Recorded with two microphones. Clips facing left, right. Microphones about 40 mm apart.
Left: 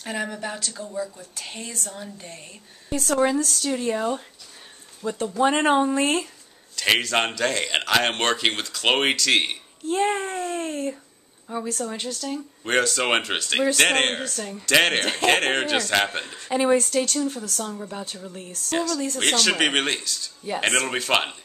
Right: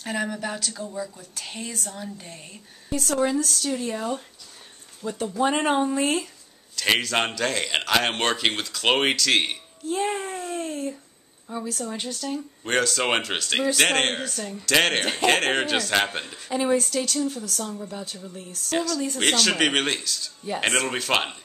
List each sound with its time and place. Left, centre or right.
0.0 s a man's voice: centre
3.1 s a man's voice: centre
11.4 s a woman's voice: centre
12.0 s a man's voice: centre
16.4 s speech: centre
17.6 s a woman's voice: left
18.7 s a man's voice: centre